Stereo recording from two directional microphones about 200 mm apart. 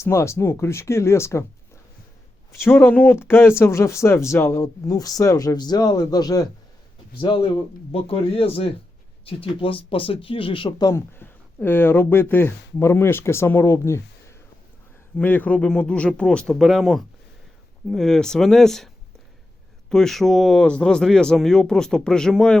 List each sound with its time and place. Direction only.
0.0 s speech: 15° left (ahead or behind)
19.9 s speech: centre (ahead or behind)